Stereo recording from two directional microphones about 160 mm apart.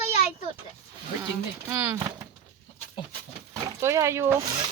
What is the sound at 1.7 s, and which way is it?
Speech, 15° right (ahead or behind).